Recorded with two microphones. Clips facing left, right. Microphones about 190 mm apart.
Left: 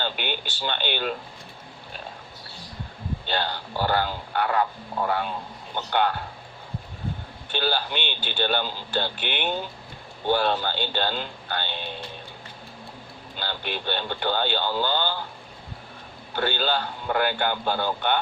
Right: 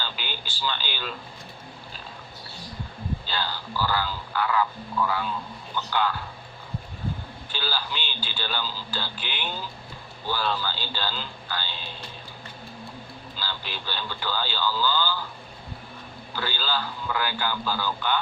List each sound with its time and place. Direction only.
0.0 s speech: 55° left (ahead or behind)
3.2 s speech: 60° left (ahead or behind)
7.5 s speech: 60° left (ahead or behind)
13.3 s speech: 60° left (ahead or behind)
16.3 s speech: 60° left (ahead or behind)